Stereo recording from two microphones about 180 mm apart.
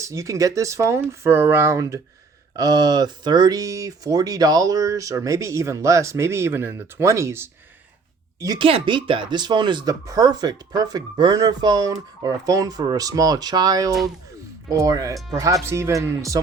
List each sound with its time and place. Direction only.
0.0 s speech: 15° right (ahead or behind)